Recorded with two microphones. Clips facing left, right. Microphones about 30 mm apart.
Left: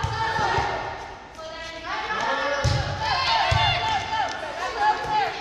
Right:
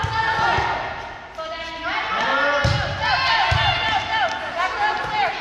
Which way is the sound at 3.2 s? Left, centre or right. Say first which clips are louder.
Right 1 dB; centre.